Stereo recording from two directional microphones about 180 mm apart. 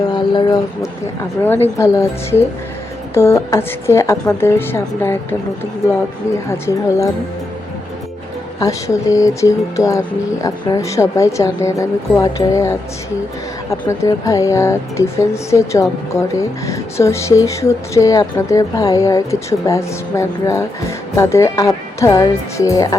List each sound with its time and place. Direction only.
0.0 s speech: 25° left (ahead or behind)
8.5 s speech: 20° left (ahead or behind)